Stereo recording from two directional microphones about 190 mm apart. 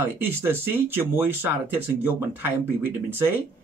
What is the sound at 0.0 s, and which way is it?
Speech, 10° right (ahead or behind).